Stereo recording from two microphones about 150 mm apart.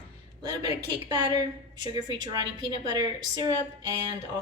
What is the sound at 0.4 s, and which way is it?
A woman's voice, 25° right (ahead or behind).